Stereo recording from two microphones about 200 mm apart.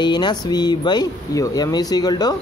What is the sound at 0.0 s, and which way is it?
Speech, 20° left (ahead or behind).